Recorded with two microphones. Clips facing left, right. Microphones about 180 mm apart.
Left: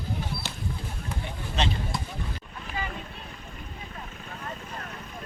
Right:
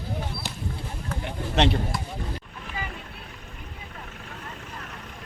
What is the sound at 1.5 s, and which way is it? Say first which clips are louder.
Speech: right 7 dB; 70° right (ahead or behind).